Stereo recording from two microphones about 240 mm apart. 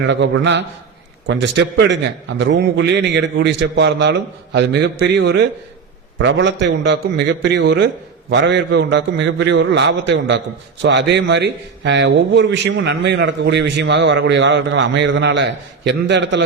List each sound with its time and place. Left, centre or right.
0.0 s a man's voice: right